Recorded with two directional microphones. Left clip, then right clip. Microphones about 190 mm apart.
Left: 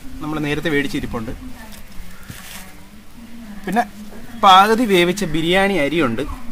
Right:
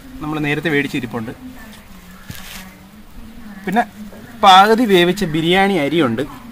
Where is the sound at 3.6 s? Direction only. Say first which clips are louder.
Right 2 dB; 20° right (ahead or behind).